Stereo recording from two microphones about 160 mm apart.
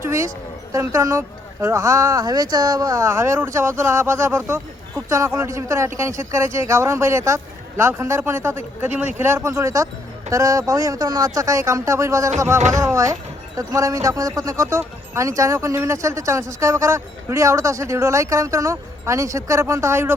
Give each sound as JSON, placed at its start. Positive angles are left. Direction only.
{"t": 0.0, "sound": "speech", "side_deg": -20}